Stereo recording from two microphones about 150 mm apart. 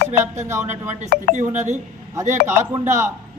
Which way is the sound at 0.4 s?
15° right (ahead or behind).